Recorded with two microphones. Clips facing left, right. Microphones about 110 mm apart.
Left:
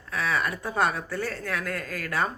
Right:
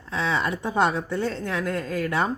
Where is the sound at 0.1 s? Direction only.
25° right (ahead or behind).